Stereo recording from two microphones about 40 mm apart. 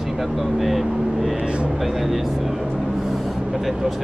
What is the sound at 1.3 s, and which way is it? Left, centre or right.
Speech, right.